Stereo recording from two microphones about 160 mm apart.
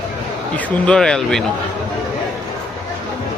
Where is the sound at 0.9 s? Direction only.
5° left (ahead or behind).